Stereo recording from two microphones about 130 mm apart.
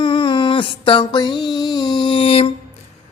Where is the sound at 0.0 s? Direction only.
40° left (ahead or behind).